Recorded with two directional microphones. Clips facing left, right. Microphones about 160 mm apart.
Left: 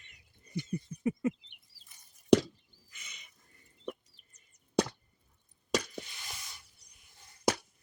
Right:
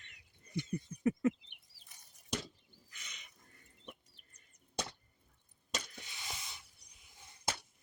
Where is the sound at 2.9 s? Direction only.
5° left (ahead or behind).